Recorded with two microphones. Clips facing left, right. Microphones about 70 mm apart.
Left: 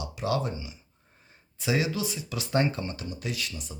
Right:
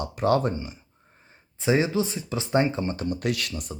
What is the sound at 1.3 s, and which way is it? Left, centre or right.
Speech, right.